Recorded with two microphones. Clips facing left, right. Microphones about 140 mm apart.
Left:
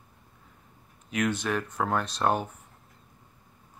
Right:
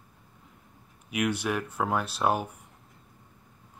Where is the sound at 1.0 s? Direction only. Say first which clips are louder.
Even; 10° right (ahead or behind).